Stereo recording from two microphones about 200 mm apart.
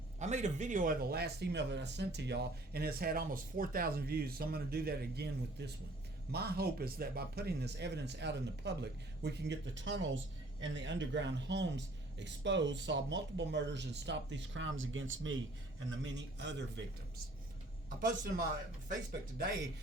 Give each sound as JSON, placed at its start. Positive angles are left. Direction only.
{"t": 0.2, "sound": "a man's voice", "side_deg": -35}
{"t": 16.1, "sound": "a man's voice", "side_deg": -60}
{"t": 17.8, "sound": "a man's voice", "side_deg": -40}